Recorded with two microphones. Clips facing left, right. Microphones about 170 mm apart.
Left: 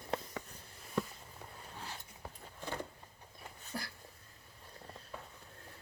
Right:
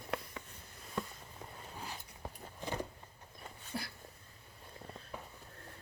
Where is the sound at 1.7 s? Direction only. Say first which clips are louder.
Right 1 dB; 15° right (ahead or behind).